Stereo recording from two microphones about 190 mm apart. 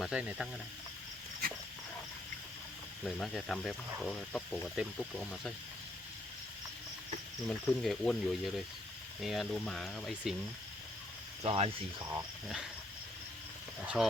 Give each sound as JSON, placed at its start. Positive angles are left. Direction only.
{"t": 0.0, "sound": "speech", "side_deg": -5}
{"t": 3.0, "sound": "speech", "side_deg": 0}
{"t": 7.4, "sound": "speech", "side_deg": 0}
{"t": 11.4, "sound": "speech", "side_deg": -30}
{"t": 13.8, "sound": "speech", "side_deg": -5}